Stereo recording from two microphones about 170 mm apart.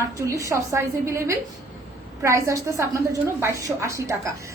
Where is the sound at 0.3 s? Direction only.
20° right (ahead or behind).